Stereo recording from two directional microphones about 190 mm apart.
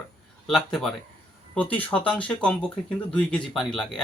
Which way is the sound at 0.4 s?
Centre (ahead or behind).